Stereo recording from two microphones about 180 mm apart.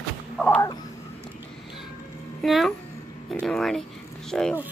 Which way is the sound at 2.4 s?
Centre (ahead or behind).